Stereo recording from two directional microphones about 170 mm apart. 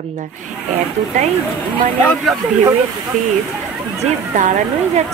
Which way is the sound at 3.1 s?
45° right (ahead or behind).